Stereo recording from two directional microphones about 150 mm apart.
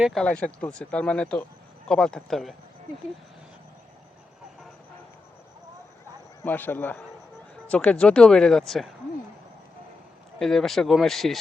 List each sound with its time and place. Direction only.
0.0 s speech: centre (ahead or behind)
6.4 s speech: 10° left (ahead or behind)
10.3 s speech: 5° left (ahead or behind)